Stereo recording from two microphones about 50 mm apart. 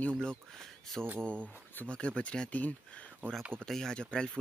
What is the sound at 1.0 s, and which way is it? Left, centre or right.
Speech, right.